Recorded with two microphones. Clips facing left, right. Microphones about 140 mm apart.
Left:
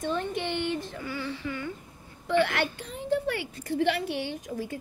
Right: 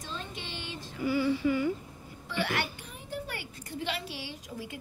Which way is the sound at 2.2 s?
60° left (ahead or behind).